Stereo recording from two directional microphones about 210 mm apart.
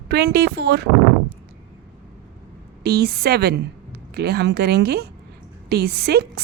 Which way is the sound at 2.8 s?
50° right (ahead or behind).